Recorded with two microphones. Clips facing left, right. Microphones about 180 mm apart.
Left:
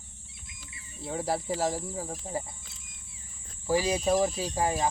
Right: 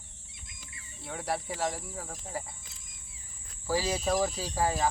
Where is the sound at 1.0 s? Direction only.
25° left (ahead or behind).